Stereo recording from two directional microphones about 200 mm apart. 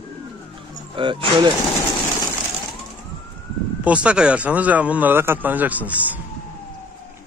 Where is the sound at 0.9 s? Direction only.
25° right (ahead or behind).